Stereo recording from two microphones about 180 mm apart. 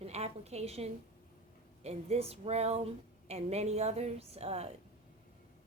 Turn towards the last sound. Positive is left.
turn(degrees=-35)  # may be behind; listen again after turning